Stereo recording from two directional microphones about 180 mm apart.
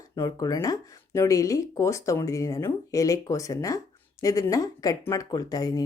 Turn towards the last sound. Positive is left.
turn(degrees=20)  # may be behind; listen again after turning